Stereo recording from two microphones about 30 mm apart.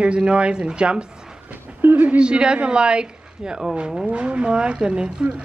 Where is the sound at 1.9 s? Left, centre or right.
Right.